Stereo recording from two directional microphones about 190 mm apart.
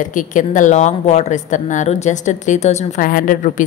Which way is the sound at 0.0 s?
45° left (ahead or behind).